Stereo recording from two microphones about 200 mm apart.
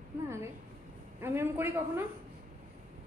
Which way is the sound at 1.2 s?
10° right (ahead or behind).